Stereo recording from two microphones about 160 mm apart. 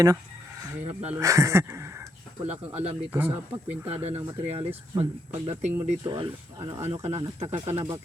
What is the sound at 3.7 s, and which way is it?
Speech, 15° right (ahead or behind).